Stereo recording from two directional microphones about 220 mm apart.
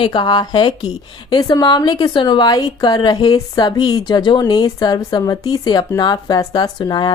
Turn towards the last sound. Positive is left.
turn(degrees=20)  # may be behind; listen again after turning